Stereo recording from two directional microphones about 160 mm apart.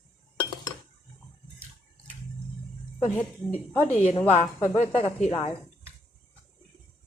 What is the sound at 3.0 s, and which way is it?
Speech, 15° left (ahead or behind).